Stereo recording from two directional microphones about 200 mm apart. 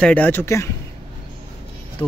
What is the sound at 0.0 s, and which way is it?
Speech, 10° left (ahead or behind).